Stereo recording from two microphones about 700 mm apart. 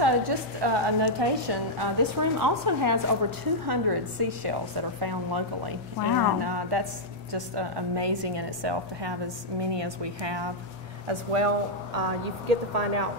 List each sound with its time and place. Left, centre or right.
0.0 s a woman's voice: right
11.1 s speech: right
12.4 s speech: right